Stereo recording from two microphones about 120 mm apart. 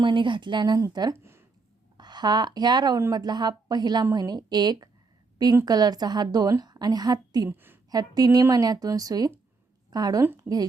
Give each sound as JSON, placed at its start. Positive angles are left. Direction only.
{"t": 0.0, "sound": "a woman's voice", "side_deg": -40}
{"t": 1.2, "sound": "a sound", "side_deg": -20}
{"t": 2.0, "sound": "a woman's voice", "side_deg": -35}
{"t": 7.5, "sound": "a woman's voice", "side_deg": -15}
{"t": 7.9, "sound": "a woman's voice", "side_deg": -30}